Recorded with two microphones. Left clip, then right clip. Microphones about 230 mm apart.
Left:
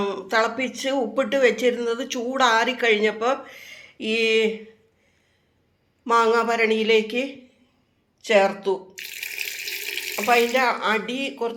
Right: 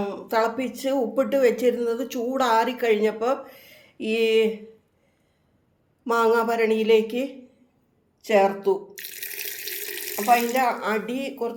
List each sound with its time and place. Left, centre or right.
0.0 s speech: centre
6.1 s speech: centre
9.1 s water tap: right
10.2 s speech: centre